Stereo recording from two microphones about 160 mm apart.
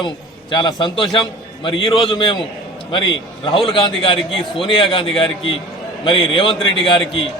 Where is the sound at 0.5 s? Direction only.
25° left (ahead or behind).